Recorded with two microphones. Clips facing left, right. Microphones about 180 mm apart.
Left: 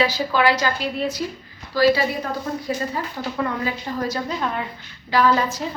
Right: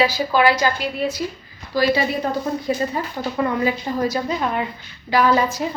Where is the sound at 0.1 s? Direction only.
10° right (ahead or behind).